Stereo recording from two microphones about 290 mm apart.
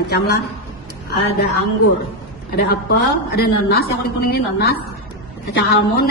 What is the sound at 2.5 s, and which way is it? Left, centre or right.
Speech, left.